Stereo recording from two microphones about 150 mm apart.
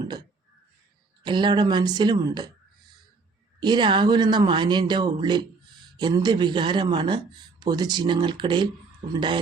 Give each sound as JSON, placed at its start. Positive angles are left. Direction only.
{"t": 0.0, "sound": "a sound", "side_deg": -25}
{"t": 1.2, "sound": "a woman's voice", "side_deg": -30}
{"t": 3.6, "sound": "speech", "side_deg": -30}